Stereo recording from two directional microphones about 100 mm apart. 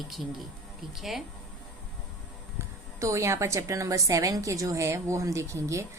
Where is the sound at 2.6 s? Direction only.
30° right (ahead or behind).